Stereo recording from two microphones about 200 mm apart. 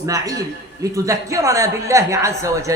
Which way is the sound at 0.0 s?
15° right (ahead or behind).